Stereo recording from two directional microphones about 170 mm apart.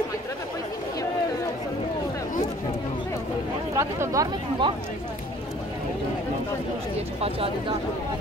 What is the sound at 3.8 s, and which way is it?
Speech, 20° right (ahead or behind).